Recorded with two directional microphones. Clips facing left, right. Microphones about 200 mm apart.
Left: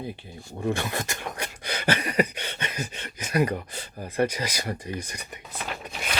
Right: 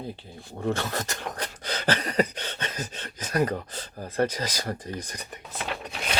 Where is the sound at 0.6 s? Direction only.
15° left (ahead or behind).